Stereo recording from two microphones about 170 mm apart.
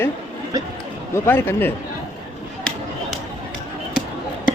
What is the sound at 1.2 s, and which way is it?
Speech, 10° left (ahead or behind).